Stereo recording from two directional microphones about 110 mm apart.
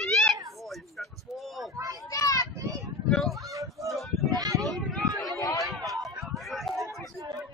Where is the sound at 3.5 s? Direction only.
30° right (ahead or behind).